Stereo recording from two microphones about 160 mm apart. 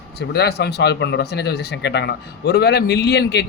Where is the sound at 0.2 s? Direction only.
90° left.